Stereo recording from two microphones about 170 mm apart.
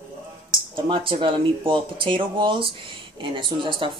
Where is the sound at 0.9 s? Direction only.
30° right (ahead or behind).